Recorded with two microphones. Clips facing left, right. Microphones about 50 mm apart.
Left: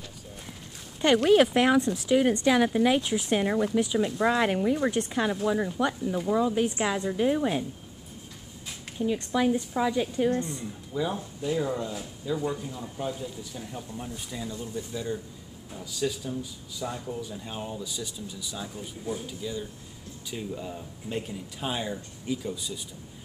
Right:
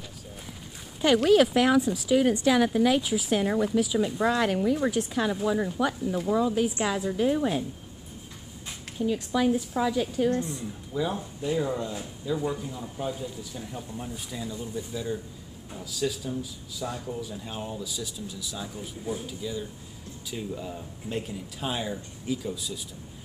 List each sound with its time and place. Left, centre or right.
1.0 s speech: centre
1.3 s speech: centre
1.8 s speech: centre
2.4 s speech: centre
3.0 s speech: centre
3.7 s speech: centre
5.3 s speech: centre
8.8 s speech: centre
10.9 s speech: centre